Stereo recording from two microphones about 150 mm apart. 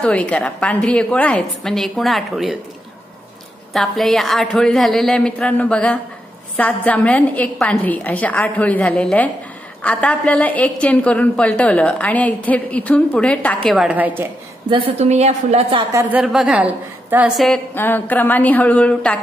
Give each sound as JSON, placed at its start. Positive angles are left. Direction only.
{"t": 0.0, "sound": "a woman's voice", "side_deg": 10}
{"t": 3.7, "sound": "a woman's voice", "side_deg": 0}
{"t": 14.7, "sound": "a woman's voice", "side_deg": -35}
{"t": 15.9, "sound": "a woman's voice", "side_deg": -20}
{"t": 16.2, "sound": "a woman's voice", "side_deg": -5}
{"t": 17.7, "sound": "a woman's voice", "side_deg": 15}